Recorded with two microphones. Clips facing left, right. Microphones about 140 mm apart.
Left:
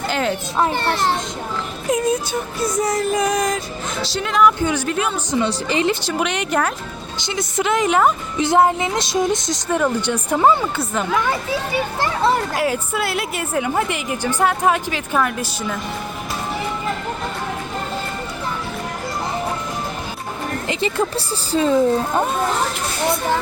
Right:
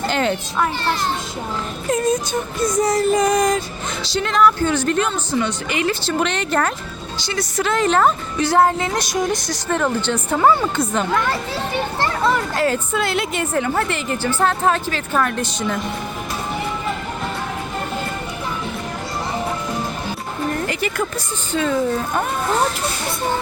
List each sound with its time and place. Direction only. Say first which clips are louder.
0.1 s a sound: right 1 dB; 5° left (ahead or behind)
0.7 s a child's voice: left 2 dB; 60° left (ahead or behind)
1.9 s child singing: even; 10° left (ahead or behind)
4.0 s a woman's voice: even; centre (ahead or behind)
5.5 s a woman's voice: left 2 dB; 30° left (ahead or behind)
5.9 s a woman's voice: even; 10° left (ahead or behind)
7.2 s a woman's voice: even; 20° left (ahead or behind)
9.6 s a woman's voice: left 1 dB; 10° left (ahead or behind)
10.6 s child singing: right 2 dB; 5° left (ahead or behind)
11.7 s a woman's voice: right 2 dB; 10° left (ahead or behind)
20.7 s speech: left 2 dB; 25° left (ahead or behind)